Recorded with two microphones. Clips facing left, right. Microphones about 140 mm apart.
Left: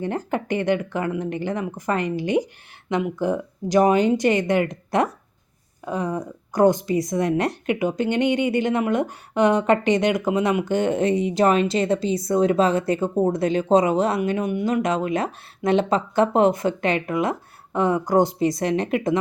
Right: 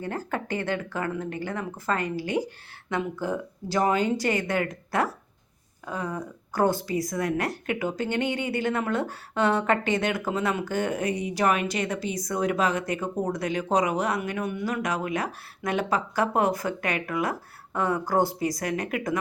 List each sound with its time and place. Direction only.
0.0 s speech: 20° left (ahead or behind)